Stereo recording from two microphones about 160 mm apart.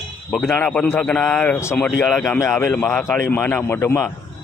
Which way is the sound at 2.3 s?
20° left (ahead or behind).